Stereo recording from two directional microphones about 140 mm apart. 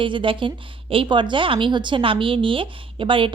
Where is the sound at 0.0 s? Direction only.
35° right (ahead or behind).